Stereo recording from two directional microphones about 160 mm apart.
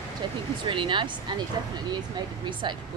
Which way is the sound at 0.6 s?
30° right (ahead or behind).